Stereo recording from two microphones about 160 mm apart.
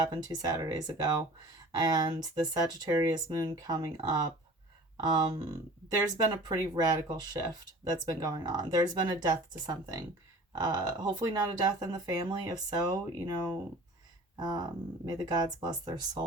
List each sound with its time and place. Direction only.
0.0 s speech: 25° right (ahead or behind)